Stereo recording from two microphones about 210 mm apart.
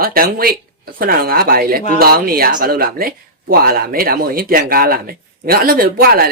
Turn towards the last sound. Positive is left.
turn(degrees=-45)  # may be behind; listen again after turning